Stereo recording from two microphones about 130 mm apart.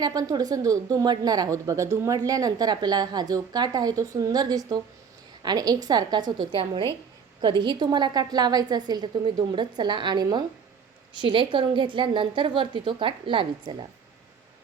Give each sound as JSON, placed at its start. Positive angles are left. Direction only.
{"t": 0.0, "sound": "a woman's voice", "side_deg": -30}